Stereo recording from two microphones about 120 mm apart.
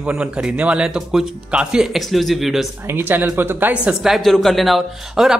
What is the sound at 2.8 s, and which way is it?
Speech, 20° right (ahead or behind).